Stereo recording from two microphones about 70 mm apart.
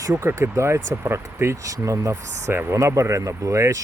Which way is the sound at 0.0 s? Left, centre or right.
Right.